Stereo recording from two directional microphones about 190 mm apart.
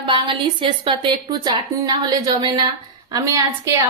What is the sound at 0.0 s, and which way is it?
A woman's voice, 25° right (ahead or behind).